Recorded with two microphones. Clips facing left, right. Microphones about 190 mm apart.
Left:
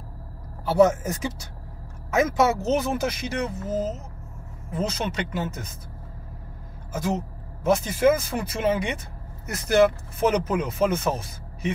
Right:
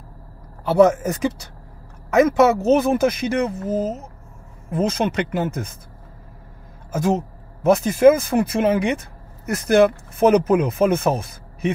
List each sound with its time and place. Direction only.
0.7 s speech: 60° right (ahead or behind)
7.6 s speech: 55° right (ahead or behind)